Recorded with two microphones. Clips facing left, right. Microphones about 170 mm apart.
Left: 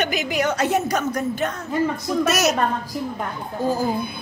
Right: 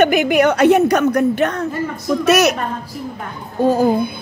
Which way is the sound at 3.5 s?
65° right (ahead or behind).